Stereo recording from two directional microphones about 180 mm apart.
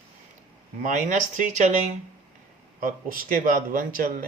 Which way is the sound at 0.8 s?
45° right (ahead or behind).